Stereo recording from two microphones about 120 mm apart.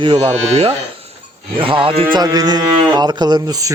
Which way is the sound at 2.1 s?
30° right (ahead or behind).